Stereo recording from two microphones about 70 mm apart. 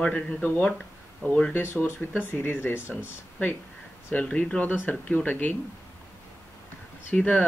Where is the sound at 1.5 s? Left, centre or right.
Left.